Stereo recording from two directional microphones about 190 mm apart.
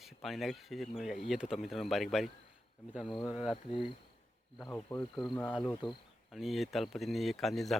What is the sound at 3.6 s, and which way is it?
Speech, 25° left (ahead or behind).